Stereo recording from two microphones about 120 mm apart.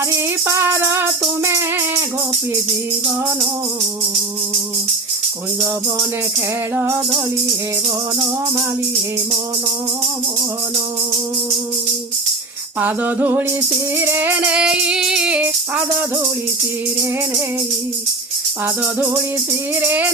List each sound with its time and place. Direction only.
0.1 s music: 25° right (ahead or behind)
6.7 s music: 20° right (ahead or behind)
12.8 s music: 15° right (ahead or behind)
18.6 s music: 15° right (ahead or behind)